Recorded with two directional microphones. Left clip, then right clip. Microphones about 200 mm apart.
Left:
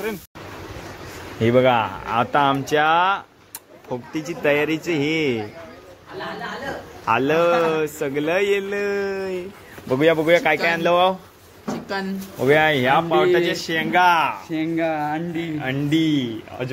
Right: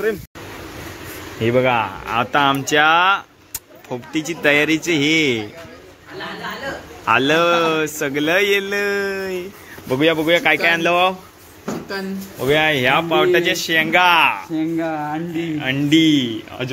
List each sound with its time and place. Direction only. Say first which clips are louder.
1.4 s speech: even; 15° left (ahead or behind)
7.1 s speech: right 3 dB; centre (ahead or behind)
9.8 s speech: even; 15° left (ahead or behind)
11.9 s speech: even; 25° left (ahead or behind)
12.8 s speech: right 2 dB; 5° left (ahead or behind)